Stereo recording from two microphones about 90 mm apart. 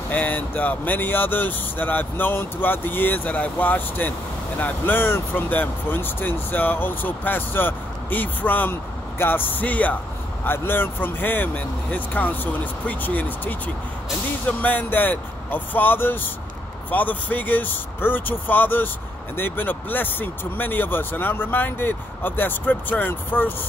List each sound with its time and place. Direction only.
0.1 s speech: 20° left (ahead or behind)
14.6 s speech: 20° left (ahead or behind)